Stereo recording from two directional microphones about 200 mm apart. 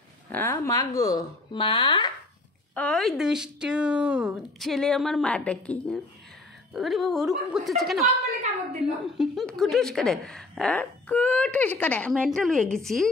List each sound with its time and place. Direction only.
0.3 s speech: 10° left (ahead or behind)
2.7 s a woman's voice: 5° left (ahead or behind)